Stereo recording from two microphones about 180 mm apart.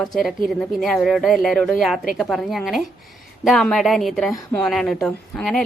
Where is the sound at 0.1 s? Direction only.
Centre (ahead or behind).